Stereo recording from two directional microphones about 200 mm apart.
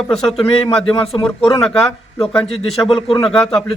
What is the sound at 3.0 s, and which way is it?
Speech, 20° left (ahead or behind).